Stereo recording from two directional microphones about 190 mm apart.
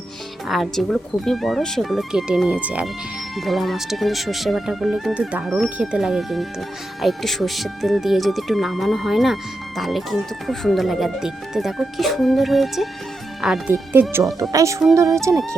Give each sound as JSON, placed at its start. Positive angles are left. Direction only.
{"t": 0.4, "sound": "speech", "side_deg": 0}